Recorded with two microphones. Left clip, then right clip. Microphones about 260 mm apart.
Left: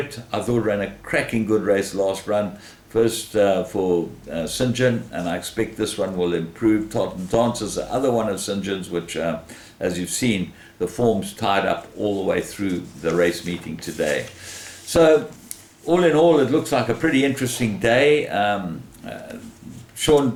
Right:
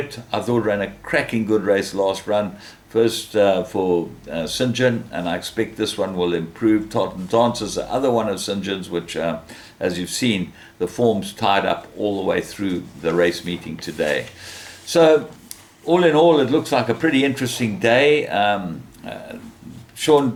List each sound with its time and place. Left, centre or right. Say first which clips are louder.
0.1 s speech: right 2 dB; centre
3.8 s speech: right 1 dB; right
4.3 s speech: right 2 dB; centre
11.9 s speech: right 1 dB; right
12.2 s speech: right 1 dB; centre